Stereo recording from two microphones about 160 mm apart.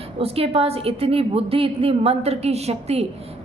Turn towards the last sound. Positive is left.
turn(degrees=-40)  # may be behind; listen again after turning